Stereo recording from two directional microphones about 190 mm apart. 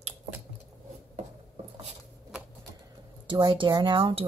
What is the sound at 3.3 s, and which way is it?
Speech, 25° right (ahead or behind).